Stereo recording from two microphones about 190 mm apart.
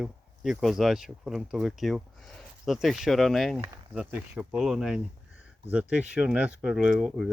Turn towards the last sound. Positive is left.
turn(degrees=-5)  # may be behind; listen again after turning